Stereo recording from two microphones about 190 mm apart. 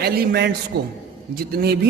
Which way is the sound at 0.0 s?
55° right (ahead or behind).